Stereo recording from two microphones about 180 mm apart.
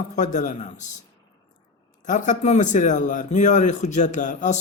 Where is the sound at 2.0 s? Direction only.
45° left (ahead or behind).